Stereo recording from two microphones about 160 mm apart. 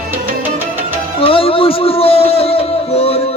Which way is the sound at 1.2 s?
35° left (ahead or behind).